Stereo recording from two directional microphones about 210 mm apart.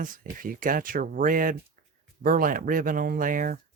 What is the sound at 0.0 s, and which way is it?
Speech, 40° right (ahead or behind).